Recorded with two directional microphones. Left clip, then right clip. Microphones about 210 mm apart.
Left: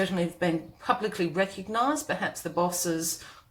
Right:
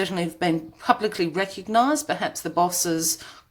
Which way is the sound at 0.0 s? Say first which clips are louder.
Right 3 dB; 45° right (ahead or behind).